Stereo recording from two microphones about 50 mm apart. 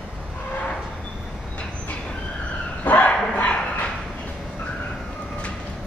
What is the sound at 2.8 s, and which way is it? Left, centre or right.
Bow-wow, left.